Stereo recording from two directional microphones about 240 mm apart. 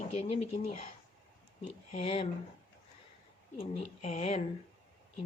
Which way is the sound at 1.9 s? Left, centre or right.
Left.